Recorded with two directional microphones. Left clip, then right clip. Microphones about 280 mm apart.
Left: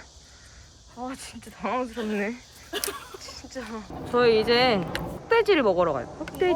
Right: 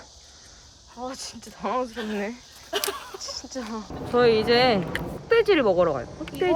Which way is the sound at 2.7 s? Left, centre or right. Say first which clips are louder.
Right 4 dB; right.